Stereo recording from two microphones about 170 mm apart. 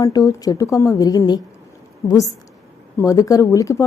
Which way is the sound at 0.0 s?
20° left (ahead or behind).